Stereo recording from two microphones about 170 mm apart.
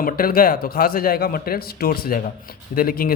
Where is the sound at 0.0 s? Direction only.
60° left (ahead or behind).